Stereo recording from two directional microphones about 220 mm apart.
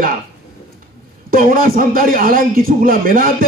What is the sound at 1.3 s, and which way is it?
Speech, 40° right (ahead or behind).